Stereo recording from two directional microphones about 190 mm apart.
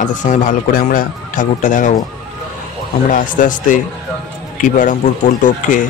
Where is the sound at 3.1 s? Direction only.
45° left (ahead or behind).